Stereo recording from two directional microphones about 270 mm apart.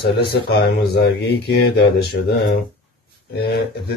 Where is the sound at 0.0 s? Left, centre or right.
Left.